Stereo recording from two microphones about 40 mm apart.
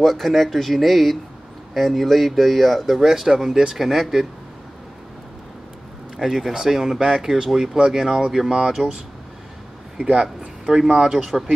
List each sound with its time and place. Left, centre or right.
0.0 s speech: centre
3.0 s speech: centre
6.1 s speech: centre
8.8 s speech: right
9.9 s a man's voice: right
10.2 s speech: centre